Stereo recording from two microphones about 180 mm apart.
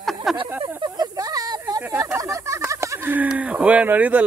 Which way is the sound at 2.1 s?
15° right (ahead or behind).